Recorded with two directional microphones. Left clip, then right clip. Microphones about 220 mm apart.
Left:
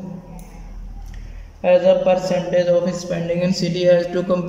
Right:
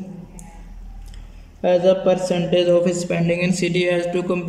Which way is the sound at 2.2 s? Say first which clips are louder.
Left 1 dB; 30° right (ahead or behind).